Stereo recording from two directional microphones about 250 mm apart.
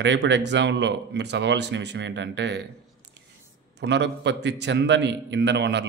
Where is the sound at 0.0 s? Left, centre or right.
Right.